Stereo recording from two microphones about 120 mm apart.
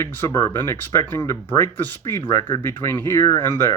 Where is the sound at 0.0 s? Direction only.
25° left (ahead or behind).